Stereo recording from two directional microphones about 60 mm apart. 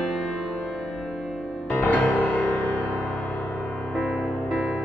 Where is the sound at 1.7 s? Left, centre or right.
Left.